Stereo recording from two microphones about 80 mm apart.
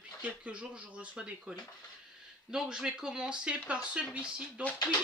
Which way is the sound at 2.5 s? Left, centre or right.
Centre.